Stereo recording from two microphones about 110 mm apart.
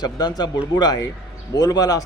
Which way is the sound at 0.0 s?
40° left (ahead or behind).